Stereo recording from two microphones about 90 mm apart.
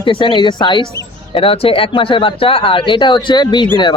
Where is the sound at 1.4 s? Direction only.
90° left.